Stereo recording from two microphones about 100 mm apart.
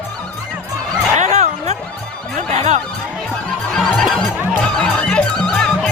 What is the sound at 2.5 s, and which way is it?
Music, 90° right.